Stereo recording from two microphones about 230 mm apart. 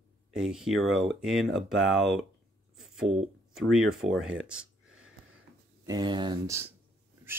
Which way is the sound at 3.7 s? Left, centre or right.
Centre.